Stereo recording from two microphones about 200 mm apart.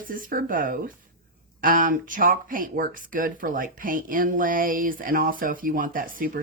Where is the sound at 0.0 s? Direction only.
45° right (ahead or behind).